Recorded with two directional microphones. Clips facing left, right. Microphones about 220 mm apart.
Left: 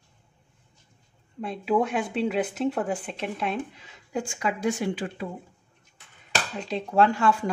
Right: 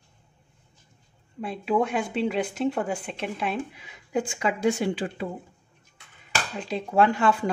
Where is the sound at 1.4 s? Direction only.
Centre (ahead or behind); by 5.3 s 30° right (ahead or behind).